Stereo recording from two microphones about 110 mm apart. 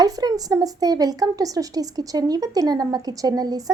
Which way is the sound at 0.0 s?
35° right (ahead or behind).